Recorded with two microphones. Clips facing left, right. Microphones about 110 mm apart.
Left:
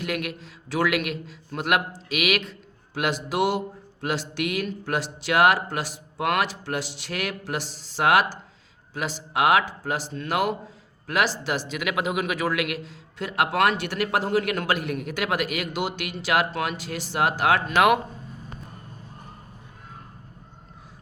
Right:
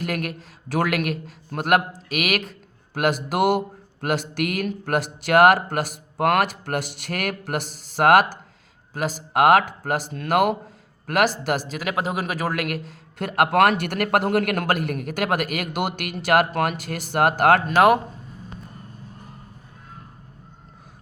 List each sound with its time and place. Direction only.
0.0 s speech: 45° right (ahead or behind)